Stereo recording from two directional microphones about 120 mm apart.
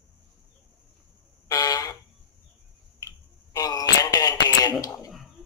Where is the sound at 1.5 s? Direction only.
30° left (ahead or behind).